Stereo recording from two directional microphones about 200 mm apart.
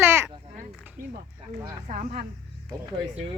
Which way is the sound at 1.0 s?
45° right (ahead or behind).